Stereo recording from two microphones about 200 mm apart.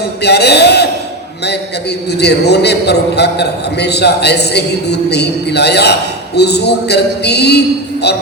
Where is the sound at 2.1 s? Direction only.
55° left (ahead or behind).